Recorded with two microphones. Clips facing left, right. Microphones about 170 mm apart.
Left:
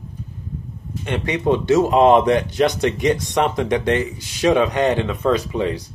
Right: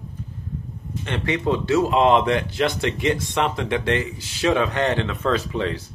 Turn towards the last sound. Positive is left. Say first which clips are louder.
# left 3 dB
turn(degrees=15)  # may be behind; listen again after turning